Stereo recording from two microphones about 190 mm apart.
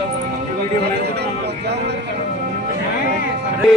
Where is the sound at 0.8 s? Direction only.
60° right (ahead or behind).